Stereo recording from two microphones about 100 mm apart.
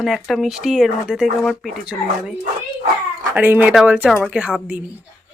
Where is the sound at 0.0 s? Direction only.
Centre (ahead or behind).